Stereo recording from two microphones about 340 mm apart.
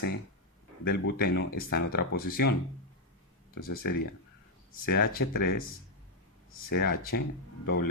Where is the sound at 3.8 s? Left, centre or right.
Left.